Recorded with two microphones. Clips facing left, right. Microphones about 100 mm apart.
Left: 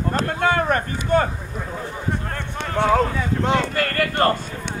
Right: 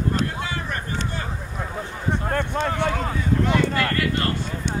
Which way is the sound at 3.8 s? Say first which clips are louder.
Left 3 dB; 50° left (ahead or behind).